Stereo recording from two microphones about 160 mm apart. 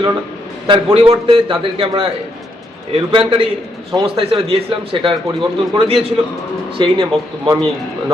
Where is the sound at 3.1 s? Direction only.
35° right (ahead or behind).